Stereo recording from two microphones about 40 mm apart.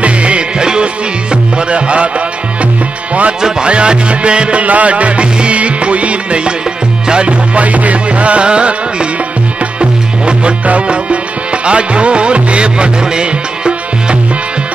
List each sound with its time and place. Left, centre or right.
0.0 s music: right
1.7 s music: right
3.4 s music: right
9.8 s music: right